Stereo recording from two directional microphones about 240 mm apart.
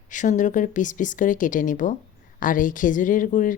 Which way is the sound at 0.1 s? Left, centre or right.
Left.